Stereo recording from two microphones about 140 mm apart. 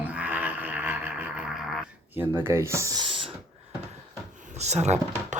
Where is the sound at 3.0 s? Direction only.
40° right (ahead or behind).